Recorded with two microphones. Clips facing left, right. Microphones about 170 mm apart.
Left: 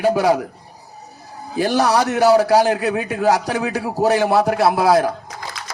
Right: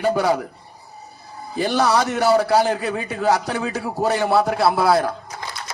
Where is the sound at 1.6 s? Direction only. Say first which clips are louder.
Left 2 dB; 15° left (ahead or behind).